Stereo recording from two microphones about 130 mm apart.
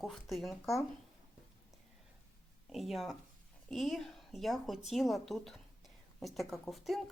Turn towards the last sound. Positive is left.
turn(degrees=0)  # may be behind; listen again after turning